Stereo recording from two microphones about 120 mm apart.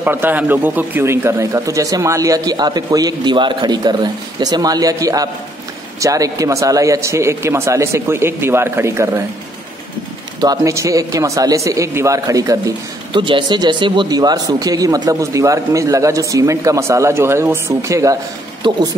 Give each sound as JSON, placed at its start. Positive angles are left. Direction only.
{"t": 0.0, "sound": "a man's voice", "side_deg": -15}
{"t": 10.4, "sound": "speech", "side_deg": -30}
{"t": 13.1, "sound": "speech", "side_deg": -45}
{"t": 18.6, "sound": "a man's voice", "side_deg": -40}